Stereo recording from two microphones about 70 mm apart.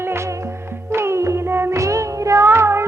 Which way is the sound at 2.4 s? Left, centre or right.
Right.